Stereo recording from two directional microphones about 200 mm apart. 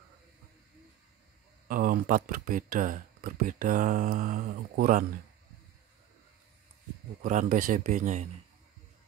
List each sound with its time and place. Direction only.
1.7 s speech: 45° right (ahead or behind)
7.2 s speech: 40° right (ahead or behind)